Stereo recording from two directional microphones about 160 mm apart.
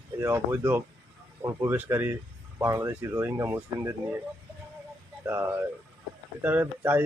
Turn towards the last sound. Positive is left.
turn(degrees=-15)  # may be behind; listen again after turning